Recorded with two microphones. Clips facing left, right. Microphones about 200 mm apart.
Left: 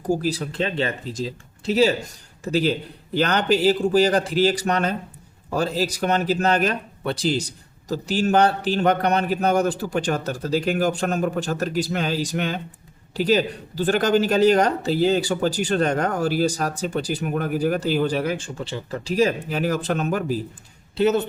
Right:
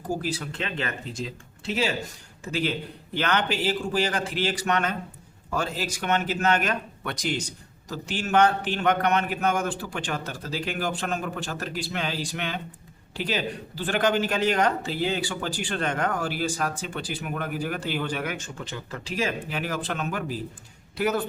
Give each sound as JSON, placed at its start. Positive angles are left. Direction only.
{"t": 0.2, "sound": "a man's voice", "side_deg": 35}
{"t": 20.9, "sound": "a man's voice", "side_deg": 25}